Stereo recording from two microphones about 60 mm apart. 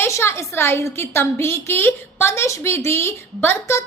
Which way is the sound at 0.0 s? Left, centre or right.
Left.